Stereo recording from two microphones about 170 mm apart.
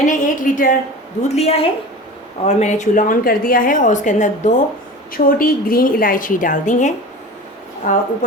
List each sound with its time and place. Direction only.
0.0 s a sound: 50° left (ahead or behind)
1.3 s a woman's voice: 35° left (ahead or behind)
5.1 s a woman's voice: 55° left (ahead or behind)
7.8 s speech: 60° left (ahead or behind)